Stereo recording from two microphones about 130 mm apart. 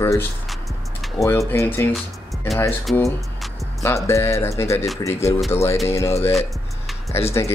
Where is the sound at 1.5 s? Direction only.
20° left (ahead or behind).